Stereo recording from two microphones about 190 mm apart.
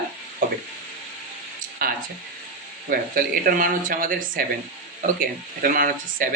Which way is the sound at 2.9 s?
50° right (ahead or behind).